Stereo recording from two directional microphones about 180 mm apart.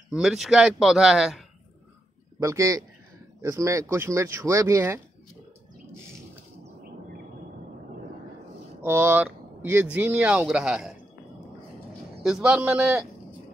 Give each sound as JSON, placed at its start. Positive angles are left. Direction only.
{"t": 0.1, "sound": "a man's voice", "side_deg": 0}
{"t": 2.4, "sound": "speech", "side_deg": -15}
{"t": 8.8, "sound": "speech", "side_deg": -10}
{"t": 12.2, "sound": "a man's voice", "side_deg": -5}